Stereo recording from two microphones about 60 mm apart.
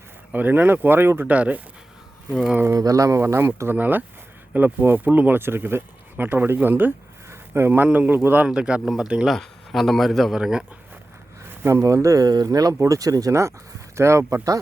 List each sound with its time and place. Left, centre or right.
0.3 s speech: right
1.3 s speech: right
2.7 s speech: right
3.2 s speech: right
3.8 s speech: right
5.4 s speech: right
7.3 s a sound: right
7.9 s speech: right
8.4 s speech: centre
9.2 s a man's voice: centre
11.6 s speech: right
12.0 s speech: right
12.8 s speech: right
13.9 s speech: right